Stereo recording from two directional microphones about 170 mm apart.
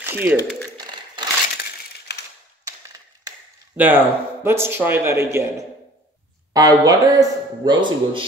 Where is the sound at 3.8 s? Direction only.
10° right (ahead or behind).